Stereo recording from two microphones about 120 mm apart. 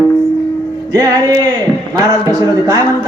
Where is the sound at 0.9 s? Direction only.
30° right (ahead or behind).